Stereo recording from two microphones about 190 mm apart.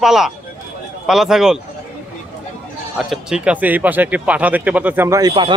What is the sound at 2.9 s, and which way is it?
Speech, 5° right (ahead or behind).